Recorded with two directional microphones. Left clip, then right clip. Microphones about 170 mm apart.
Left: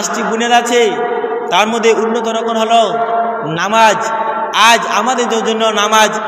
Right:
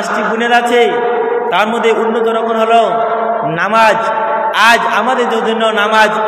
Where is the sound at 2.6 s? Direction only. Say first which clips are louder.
Right 1 dB; 30° left (ahead or behind).